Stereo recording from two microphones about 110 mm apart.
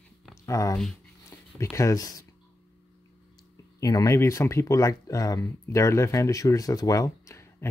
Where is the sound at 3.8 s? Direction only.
30° left (ahead or behind).